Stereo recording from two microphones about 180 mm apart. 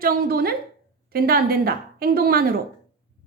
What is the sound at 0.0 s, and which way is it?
A woman's voice, 55° right (ahead or behind).